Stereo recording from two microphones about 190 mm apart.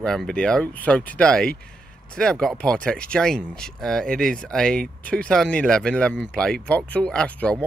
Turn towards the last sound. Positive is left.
turn(degrees=5)  # may be behind; listen again after turning